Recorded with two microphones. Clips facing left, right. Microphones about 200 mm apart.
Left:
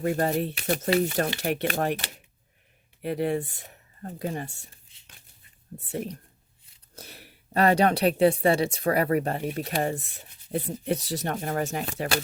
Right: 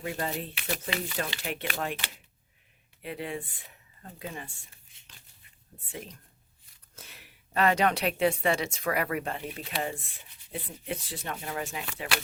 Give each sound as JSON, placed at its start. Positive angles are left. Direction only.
{"t": 0.0, "sound": "speech", "side_deg": 45}
{"t": 6.9, "sound": "speech", "side_deg": 35}